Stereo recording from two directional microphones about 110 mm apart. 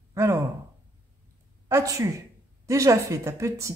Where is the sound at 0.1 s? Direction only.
25° right (ahead or behind).